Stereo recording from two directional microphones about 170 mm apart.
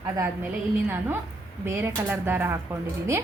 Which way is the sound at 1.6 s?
15° right (ahead or behind).